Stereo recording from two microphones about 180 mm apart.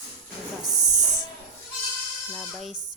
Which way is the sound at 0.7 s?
20° right (ahead or behind).